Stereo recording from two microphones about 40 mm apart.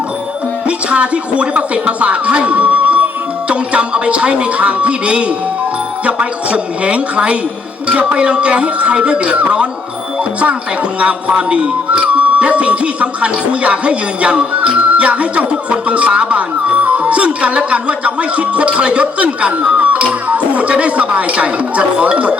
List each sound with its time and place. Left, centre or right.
0.9 s speech: right
11.0 s speech: right
14.6 s music: right
15.7 s speech: right